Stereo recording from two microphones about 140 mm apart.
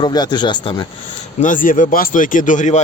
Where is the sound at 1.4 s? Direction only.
70° left (ahead or behind).